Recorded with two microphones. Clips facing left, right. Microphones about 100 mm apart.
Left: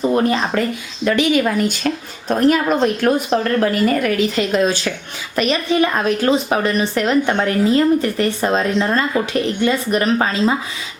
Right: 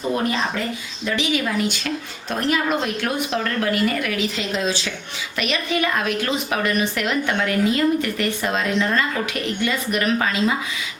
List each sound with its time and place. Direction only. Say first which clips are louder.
1.0 s a woman's voice: left 7 dB; 50° left (ahead or behind)
5.4 s a woman's voice: left 6 dB; 35° left (ahead or behind)